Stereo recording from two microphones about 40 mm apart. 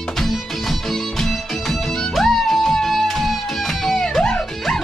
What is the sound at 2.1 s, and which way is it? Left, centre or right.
Music, centre.